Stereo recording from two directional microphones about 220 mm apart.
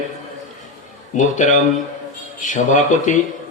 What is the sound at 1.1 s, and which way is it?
A man's voice, 35° left (ahead or behind).